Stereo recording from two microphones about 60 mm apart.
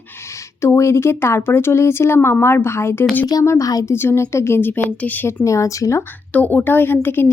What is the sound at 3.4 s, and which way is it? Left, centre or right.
Speech, left.